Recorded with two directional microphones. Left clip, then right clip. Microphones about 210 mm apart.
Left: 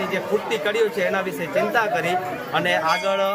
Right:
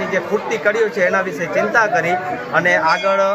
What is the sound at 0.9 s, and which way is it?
Speech, 5° left (ahead or behind).